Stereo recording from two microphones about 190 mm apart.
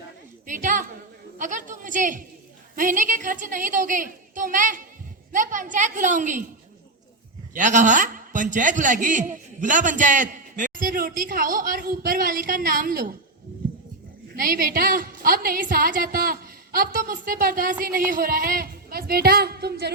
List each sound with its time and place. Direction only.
0.4 s a woman's voice: 45° right (ahead or behind)
7.5 s a man's voice: 40° right (ahead or behind)
14.3 s a man's voice: 50° right (ahead or behind)